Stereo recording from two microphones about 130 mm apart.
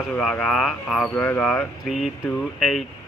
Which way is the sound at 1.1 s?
15° left (ahead or behind).